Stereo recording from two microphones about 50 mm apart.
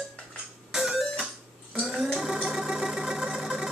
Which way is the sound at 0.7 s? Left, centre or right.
Centre.